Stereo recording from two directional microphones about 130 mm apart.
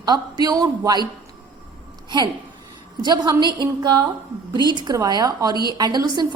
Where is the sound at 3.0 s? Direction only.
35° right (ahead or behind).